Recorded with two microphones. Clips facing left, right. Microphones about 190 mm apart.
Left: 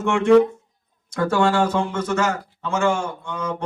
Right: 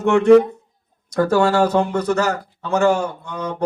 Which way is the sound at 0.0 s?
35° right (ahead or behind).